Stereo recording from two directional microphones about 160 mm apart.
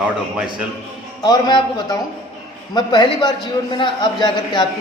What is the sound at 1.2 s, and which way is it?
A man's voice, 25° left (ahead or behind).